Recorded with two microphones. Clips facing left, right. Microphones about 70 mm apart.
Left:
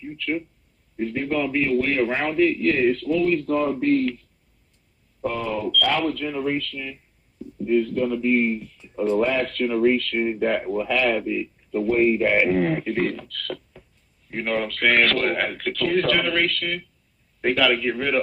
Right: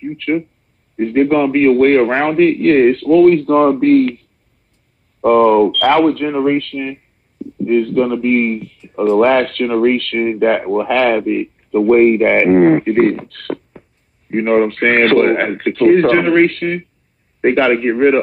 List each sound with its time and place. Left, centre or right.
0.0 s a man's voice: right